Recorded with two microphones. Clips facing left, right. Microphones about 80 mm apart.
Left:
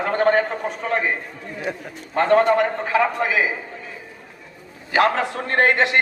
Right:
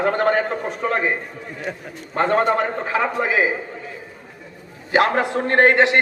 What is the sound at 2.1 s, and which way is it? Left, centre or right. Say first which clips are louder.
A man's voice: left 2 dB; centre.